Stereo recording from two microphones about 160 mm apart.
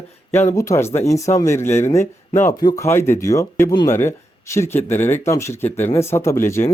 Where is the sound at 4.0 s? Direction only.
15° left (ahead or behind).